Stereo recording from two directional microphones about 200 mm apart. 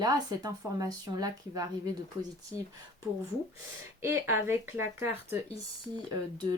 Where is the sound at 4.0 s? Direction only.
10° right (ahead or behind).